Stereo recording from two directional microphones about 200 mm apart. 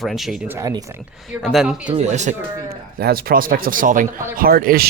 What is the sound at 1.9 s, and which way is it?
Speech, 35° right (ahead or behind).